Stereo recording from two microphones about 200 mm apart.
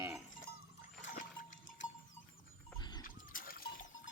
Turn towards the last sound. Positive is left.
turn(degrees=45)  # may be behind; listen again after turning